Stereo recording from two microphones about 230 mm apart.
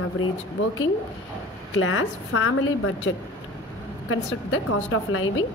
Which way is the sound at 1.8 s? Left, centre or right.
Left.